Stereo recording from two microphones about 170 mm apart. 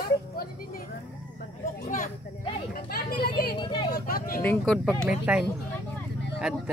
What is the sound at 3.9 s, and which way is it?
Vehicle, 60° left (ahead or behind).